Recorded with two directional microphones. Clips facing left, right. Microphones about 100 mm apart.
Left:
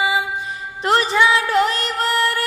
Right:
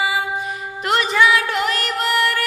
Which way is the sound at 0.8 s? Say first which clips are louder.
Left 1 dB; 30° left (ahead or behind).